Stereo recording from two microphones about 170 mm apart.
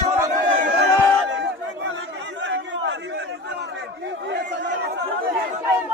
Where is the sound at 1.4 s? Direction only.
90° right.